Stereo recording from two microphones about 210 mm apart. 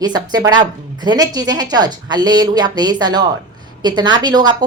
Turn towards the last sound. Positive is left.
turn(degrees=-20)  # may be behind; listen again after turning